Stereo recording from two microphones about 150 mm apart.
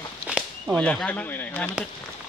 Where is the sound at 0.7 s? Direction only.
5° left (ahead or behind).